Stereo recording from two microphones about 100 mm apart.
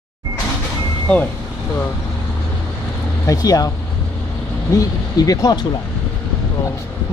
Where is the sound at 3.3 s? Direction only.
40° left (ahead or behind).